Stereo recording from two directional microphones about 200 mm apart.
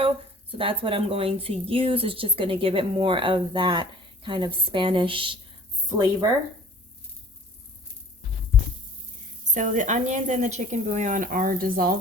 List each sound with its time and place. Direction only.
0.5 s a woman's voice: 25° right (ahead or behind)
5.9 s speech: 15° right (ahead or behind)
9.4 s a woman's voice: 40° right (ahead or behind)